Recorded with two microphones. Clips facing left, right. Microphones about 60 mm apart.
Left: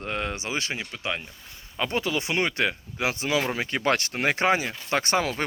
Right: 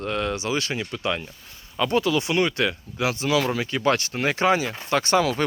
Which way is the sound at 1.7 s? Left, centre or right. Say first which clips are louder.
Right 5 dB; left.